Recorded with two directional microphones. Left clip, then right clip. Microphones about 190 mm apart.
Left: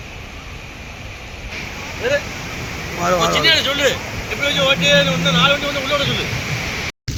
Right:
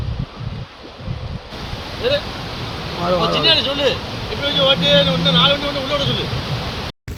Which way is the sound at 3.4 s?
35° right (ahead or behind).